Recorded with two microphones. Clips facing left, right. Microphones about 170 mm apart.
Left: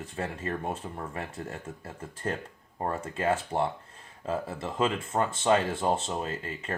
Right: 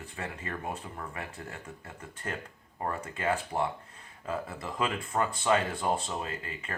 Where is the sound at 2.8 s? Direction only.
25° left (ahead or behind).